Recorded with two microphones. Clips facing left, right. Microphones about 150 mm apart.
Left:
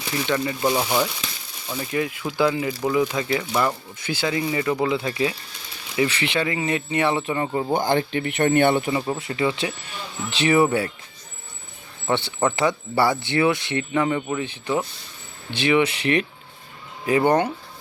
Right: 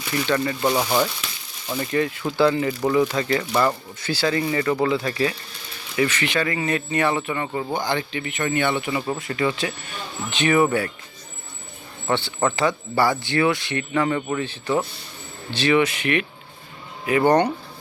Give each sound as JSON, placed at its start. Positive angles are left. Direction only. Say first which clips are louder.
{"t": 0.3, "sound": "speech", "louder": "right 1 dB", "side_deg": 15}
{"t": 0.7, "sound": "speech", "louder": "right 1 dB", "side_deg": 0}
{"t": 4.0, "sound": "speech", "louder": "right 2 dB", "side_deg": 15}
{"t": 7.2, "sound": "speech", "louder": "left 2 dB", "side_deg": 30}
{"t": 7.7, "sound": "speech", "louder": "left 4 dB", "side_deg": 50}
{"t": 9.1, "sound": "speech", "louder": "even", "side_deg": 25}
{"t": 12.0, "sound": "speech", "louder": "even", "side_deg": 20}
{"t": 16.0, "sound": "speech", "louder": "left 1 dB", "side_deg": 30}
{"t": 17.2, "sound": "speech", "louder": "right 3 dB", "side_deg": 5}